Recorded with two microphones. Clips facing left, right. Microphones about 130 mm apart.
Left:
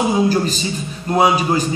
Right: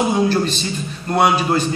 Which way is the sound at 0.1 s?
10° left (ahead or behind).